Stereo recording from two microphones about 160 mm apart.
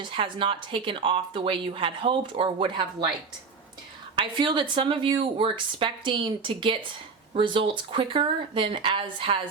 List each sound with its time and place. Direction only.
0.0 s speech: 35° right (ahead or behind)
4.1 s speech: 30° right (ahead or behind)